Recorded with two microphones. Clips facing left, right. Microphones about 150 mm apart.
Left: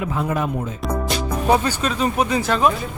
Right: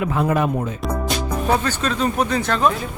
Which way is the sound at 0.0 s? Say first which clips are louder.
Right 3 dB; 65° right (ahead or behind).